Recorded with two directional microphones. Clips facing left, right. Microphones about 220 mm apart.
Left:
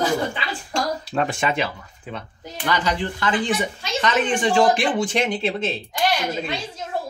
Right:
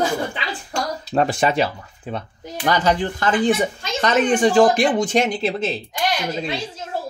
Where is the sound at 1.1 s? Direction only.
35° right (ahead or behind).